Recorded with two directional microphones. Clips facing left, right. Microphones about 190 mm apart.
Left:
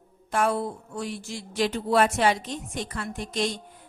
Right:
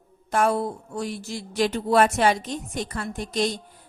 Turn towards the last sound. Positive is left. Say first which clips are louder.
# right 3 dB
turn(degrees=-35)  # may be behind; listen again after turning